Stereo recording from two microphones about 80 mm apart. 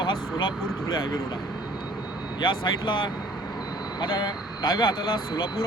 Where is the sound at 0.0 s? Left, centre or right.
Left.